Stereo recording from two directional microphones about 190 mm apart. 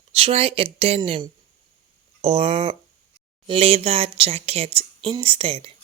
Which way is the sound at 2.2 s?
30° right (ahead or behind).